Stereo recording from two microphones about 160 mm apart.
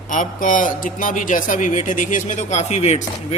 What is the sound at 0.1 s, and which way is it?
Speech, 55° left (ahead or behind).